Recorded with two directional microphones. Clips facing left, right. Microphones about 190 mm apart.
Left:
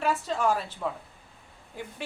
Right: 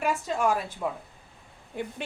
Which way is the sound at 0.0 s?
10° right (ahead or behind).